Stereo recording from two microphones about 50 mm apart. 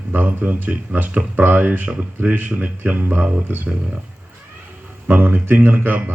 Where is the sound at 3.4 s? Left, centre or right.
Right.